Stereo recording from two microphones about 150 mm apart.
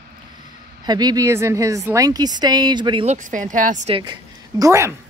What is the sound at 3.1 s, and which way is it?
Speech, 60° right (ahead or behind).